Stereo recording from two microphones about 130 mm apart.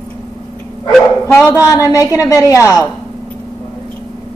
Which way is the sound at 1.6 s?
25° left (ahead or behind).